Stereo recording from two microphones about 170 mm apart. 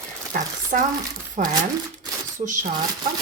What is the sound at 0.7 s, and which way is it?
Speech, 50° right (ahead or behind).